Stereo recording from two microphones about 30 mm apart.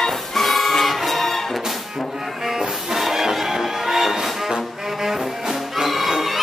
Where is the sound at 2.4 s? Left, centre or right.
Centre.